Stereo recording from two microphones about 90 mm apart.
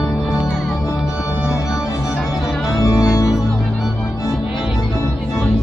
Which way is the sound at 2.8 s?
40° left (ahead or behind).